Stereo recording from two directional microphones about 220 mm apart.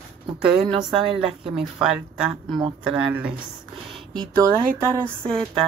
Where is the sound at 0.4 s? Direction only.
5° right (ahead or behind).